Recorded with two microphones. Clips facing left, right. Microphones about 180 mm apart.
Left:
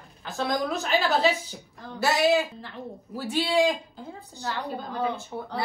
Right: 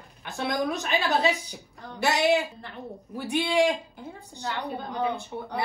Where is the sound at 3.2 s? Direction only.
20° right (ahead or behind).